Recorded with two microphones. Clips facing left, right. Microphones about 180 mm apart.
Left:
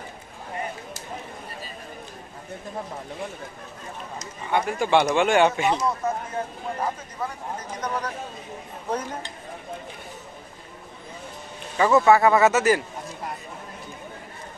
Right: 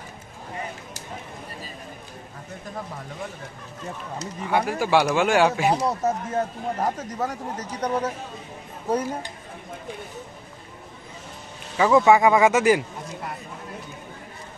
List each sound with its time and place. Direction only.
4.5 s speech: 5° right (ahead or behind)
5.9 s speech: 40° right (ahead or behind)
11.7 s speech: 10° right (ahead or behind)